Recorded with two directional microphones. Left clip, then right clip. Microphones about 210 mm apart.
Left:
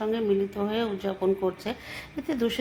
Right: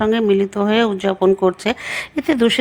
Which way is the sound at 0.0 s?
40° right (ahead or behind).